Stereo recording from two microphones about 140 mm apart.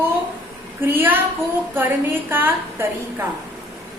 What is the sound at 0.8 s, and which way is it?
Speech, 15° right (ahead or behind).